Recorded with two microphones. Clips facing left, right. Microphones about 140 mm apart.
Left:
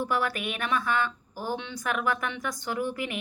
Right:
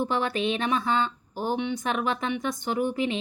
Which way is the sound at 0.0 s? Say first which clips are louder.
Right 3 dB; 25° right (ahead or behind).